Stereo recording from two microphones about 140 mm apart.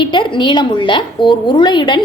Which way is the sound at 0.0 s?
35° left (ahead or behind).